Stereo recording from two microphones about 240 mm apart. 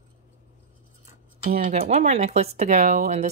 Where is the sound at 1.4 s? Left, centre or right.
Right.